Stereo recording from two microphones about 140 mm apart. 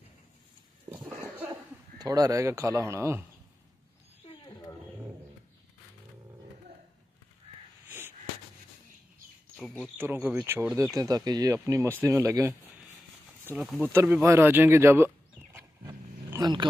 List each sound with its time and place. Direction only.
0.9 s a sound: 10° right (ahead or behind)
1.2 s cough: 15° right (ahead or behind)
2.0 s speech: 25° right (ahead or behind)
4.5 s wild animals: 25° left (ahead or behind)
9.9 s speech: 15° right (ahead or behind)
11.0 s speech: 30° right (ahead or behind)
11.5 s speech: 20° right (ahead or behind)
13.6 s speech: centre (ahead or behind)
13.9 s speech: 15° right (ahead or behind)
16.3 s speech: 30° right (ahead or behind)